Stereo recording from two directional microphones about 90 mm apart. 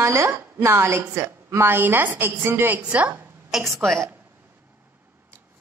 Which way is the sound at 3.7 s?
Centre (ahead or behind).